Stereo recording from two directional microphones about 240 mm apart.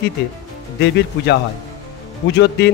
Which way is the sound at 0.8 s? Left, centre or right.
Left.